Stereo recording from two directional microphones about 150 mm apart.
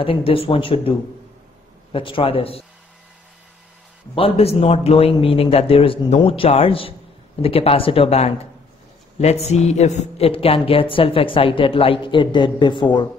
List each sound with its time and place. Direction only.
0.0 s speech: 35° left (ahead or behind)
4.1 s speech: 40° left (ahead or behind)